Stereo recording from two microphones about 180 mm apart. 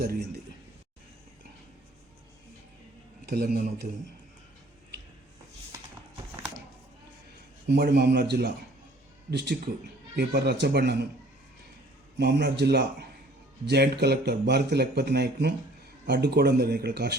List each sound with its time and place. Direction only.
3.2 s speech: 60° right (ahead or behind)
7.7 s speech: 65° right (ahead or behind)
12.2 s speech: 65° right (ahead or behind)